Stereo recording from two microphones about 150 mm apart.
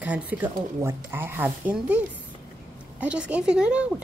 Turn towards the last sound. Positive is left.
turn(degrees=-10)  # may be behind; listen again after turning